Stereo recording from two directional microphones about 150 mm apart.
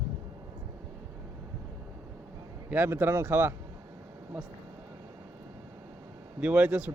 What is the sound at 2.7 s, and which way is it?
Speech, 15° right (ahead or behind).